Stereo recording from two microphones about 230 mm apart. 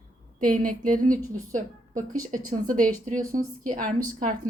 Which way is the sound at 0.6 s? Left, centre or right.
Right.